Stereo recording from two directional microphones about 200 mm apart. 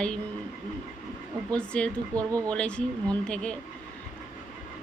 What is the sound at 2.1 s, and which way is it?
Speech, 15° right (ahead or behind).